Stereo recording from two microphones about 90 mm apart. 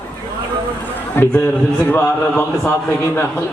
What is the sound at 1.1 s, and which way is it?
A man's voice, 20° left (ahead or behind).